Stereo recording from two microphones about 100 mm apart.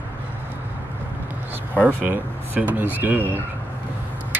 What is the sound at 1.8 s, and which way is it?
Speech, 15° right (ahead or behind).